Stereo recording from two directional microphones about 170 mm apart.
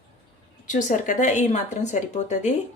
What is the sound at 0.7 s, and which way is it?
A woman's voice, 50° left (ahead or behind).